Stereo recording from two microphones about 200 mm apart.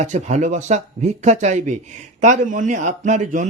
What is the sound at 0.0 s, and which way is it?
A man's voice, 35° right (ahead or behind).